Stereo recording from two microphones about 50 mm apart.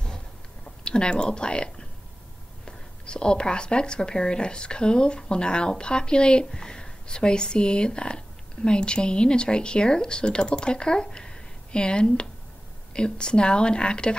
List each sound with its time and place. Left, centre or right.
0.8 s speech: centre